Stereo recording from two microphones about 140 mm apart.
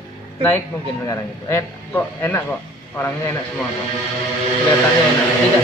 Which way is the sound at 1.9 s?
15° left (ahead or behind).